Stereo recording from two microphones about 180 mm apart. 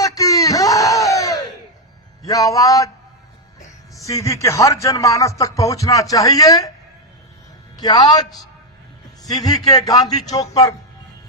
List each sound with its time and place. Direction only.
0.0 s a sound: 20° left (ahead or behind)
2.2 s a man's voice: 20° left (ahead or behind)
4.0 s speech: 15° left (ahead or behind)
7.8 s a man's voice: 20° left (ahead or behind)